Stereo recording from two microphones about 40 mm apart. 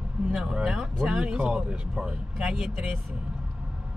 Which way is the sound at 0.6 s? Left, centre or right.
Centre.